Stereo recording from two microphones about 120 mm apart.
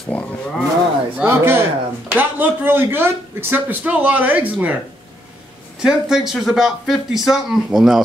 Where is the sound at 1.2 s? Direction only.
20° right (ahead or behind).